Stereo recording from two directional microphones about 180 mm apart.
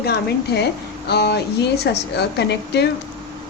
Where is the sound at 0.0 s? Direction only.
65° left (ahead or behind).